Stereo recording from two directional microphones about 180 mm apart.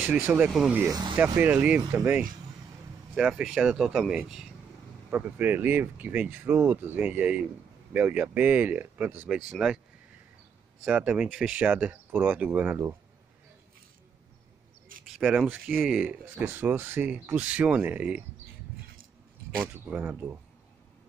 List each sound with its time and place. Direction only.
0.0 s speech: 10° right (ahead or behind)
0.8 s speech: 20° right (ahead or behind); by 9.8 s 5° right (ahead or behind)
10.8 s speech: 5° right (ahead or behind)
15.0 s speech: 5° right (ahead or behind)
19.6 s speech: 10° right (ahead or behind)